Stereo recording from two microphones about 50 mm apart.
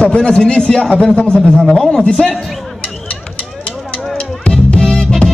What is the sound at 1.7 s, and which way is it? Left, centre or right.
Speech, centre.